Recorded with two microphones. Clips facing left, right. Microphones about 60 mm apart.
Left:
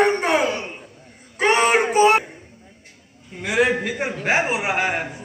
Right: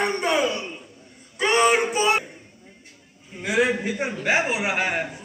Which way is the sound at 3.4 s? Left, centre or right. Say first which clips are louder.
Left 2 dB; left.